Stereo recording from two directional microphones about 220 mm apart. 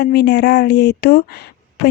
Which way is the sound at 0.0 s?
50° left (ahead or behind).